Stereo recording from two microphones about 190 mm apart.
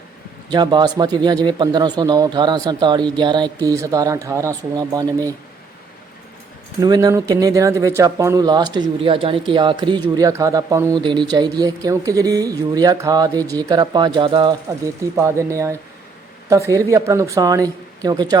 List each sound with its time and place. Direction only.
0.5 s speech: 20° right (ahead or behind)
6.8 s speech: 20° right (ahead or behind)